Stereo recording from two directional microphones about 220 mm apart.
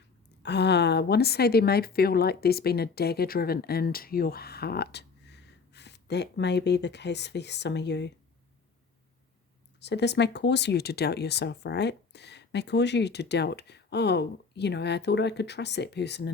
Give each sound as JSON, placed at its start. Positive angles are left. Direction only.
{"t": 0.4, "sound": "a woman's voice", "side_deg": 50}
{"t": 9.8, "sound": "a woman's voice", "side_deg": 50}